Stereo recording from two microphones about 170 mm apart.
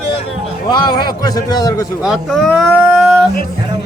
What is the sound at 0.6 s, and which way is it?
A man's voice, 25° left (ahead or behind).